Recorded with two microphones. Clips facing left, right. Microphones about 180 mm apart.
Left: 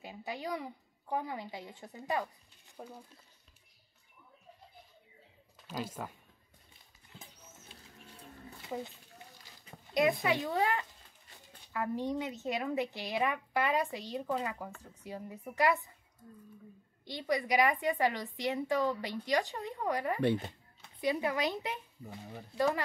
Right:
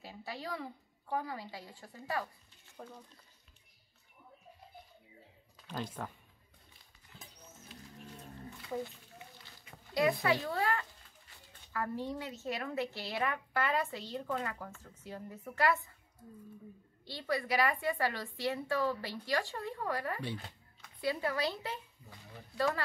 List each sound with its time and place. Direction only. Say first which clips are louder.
0.0 s a woman's voice: left 3 dB; 15° left (ahead or behind)
5.7 s a woman's voice: left 1 dB; 5° left (ahead or behind)
7.7 s music: right 5 dB; 30° left (ahead or behind)
8.6 s speech: right 1 dB; 20° left (ahead or behind)
10.2 s a woman's voice: left 1 dB; 20° left (ahead or behind)
17.0 s a woman's voice: left 2 dB; 15° left (ahead or behind)